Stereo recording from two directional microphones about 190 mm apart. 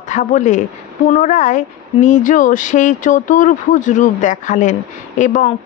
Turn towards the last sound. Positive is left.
turn(degrees=40)  # may be behind; listen again after turning